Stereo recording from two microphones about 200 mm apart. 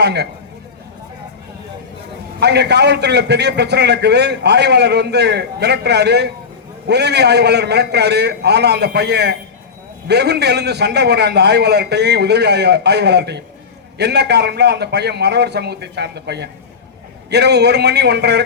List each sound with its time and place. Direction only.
0.0 s a man's voice: 55° right (ahead or behind)
2.4 s a man's voice: 55° right (ahead or behind)